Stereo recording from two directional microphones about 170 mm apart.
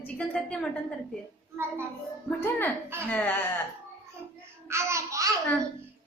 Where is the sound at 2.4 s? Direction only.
10° left (ahead or behind).